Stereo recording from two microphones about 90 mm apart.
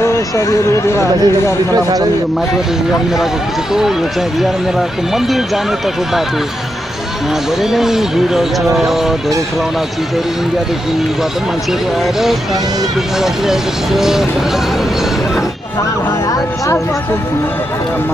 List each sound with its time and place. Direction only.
0.0 s speech: 30° left (ahead or behind)
7.7 s speech: 5° right (ahead or behind)
13.2 s speech: 5° right (ahead or behind)